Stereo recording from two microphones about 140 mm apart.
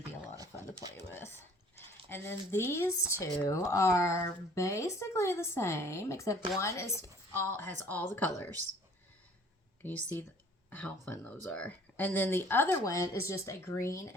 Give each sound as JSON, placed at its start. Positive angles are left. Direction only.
{"t": 0.3, "sound": "a sound", "side_deg": -25}
{"t": 0.9, "sound": "whispering", "side_deg": 15}
{"t": 2.0, "sound": "speech", "side_deg": 15}
{"t": 9.8, "sound": "speech", "side_deg": 15}